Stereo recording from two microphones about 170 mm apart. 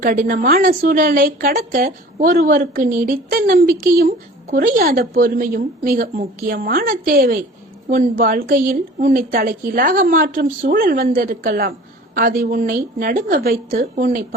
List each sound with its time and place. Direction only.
0.0 s speech: 55° right (ahead or behind)